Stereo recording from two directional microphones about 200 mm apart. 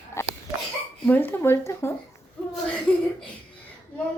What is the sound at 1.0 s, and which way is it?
Speech, 10° left (ahead or behind).